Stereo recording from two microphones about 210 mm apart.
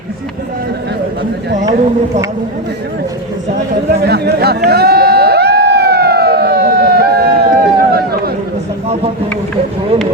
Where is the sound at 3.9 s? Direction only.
50° right (ahead or behind).